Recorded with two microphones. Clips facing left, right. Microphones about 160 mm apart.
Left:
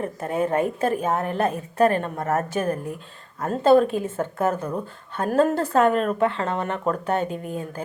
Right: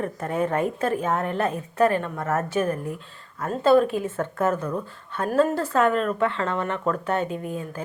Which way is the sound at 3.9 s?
30° left (ahead or behind).